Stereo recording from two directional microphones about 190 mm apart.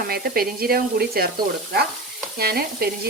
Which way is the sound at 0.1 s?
55° right (ahead or behind).